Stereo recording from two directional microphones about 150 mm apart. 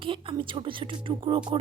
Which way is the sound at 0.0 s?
35° right (ahead or behind).